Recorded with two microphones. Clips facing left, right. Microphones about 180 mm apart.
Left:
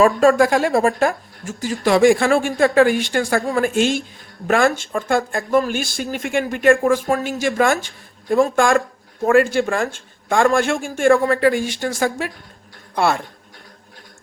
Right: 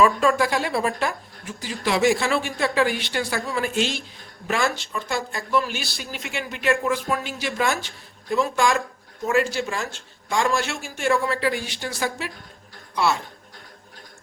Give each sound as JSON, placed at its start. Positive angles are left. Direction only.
{"t": 0.0, "sound": "speech", "side_deg": 45}